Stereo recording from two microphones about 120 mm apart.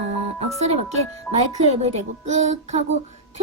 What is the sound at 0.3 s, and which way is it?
A woman's voice, 65° right (ahead or behind).